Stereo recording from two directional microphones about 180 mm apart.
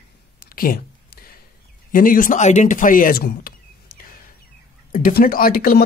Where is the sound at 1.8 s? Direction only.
50° left (ahead or behind).